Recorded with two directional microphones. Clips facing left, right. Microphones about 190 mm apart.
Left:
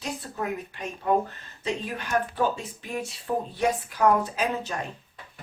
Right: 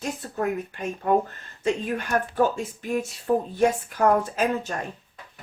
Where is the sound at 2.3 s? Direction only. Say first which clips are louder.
Right 4 dB; 45° right (ahead or behind).